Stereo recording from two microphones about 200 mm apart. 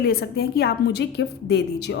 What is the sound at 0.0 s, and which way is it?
A woman's voice, 50° left (ahead or behind).